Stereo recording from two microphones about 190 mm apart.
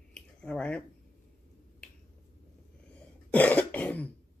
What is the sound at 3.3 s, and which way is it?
Cough, 10° left (ahead or behind).